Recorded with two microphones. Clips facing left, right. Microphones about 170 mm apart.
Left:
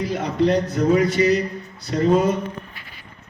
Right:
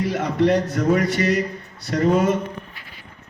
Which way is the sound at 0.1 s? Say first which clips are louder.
Even; 75° right (ahead or behind).